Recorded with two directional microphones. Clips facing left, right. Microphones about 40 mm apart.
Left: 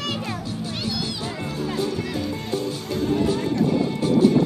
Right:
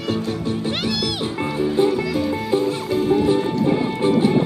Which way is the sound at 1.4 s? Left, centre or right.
Right.